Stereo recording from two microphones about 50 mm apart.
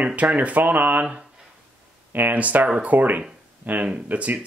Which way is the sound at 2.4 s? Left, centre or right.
Right.